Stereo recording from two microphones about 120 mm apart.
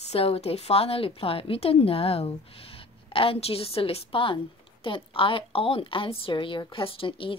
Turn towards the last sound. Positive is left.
turn(degrees=45)  # may be behind; listen again after turning